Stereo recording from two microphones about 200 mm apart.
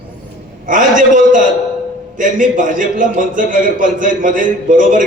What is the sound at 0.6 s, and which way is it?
A man's voice, 40° right (ahead or behind).